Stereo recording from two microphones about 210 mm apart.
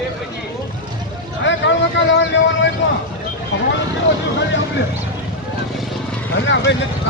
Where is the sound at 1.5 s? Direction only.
60° left (ahead or behind).